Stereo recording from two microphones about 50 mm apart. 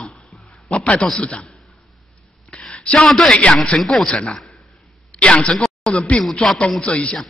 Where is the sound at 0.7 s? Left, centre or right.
Left.